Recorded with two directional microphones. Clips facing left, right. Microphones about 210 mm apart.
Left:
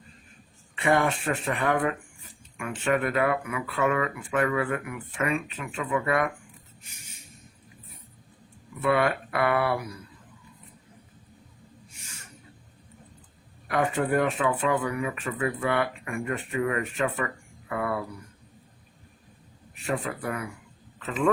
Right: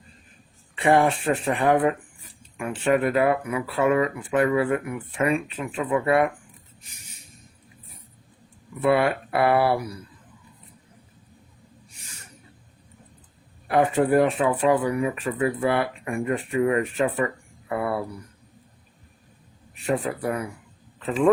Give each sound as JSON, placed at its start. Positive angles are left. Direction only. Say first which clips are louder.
{"t": 0.8, "sound": "speech", "louder": "right 4 dB", "side_deg": -30}
{"t": 6.8, "sound": "a sound", "louder": "right 1 dB", "side_deg": -40}
{"t": 8.8, "sound": "speech", "louder": "right 4 dB", "side_deg": -30}
{"t": 11.9, "sound": "owl", "louder": "right 1 dB", "side_deg": -35}
{"t": 13.7, "sound": "speech", "louder": "right 5 dB", "side_deg": -35}
{"t": 19.7, "sound": "speech", "louder": "right 5 dB", "side_deg": -35}